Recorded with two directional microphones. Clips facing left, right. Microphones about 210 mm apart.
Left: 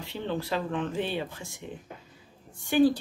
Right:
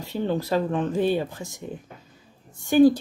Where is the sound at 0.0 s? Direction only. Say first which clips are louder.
Right 6 dB; 40° right (ahead or behind).